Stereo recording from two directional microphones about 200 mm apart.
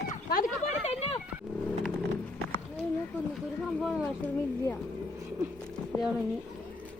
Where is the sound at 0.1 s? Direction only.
45° left (ahead or behind).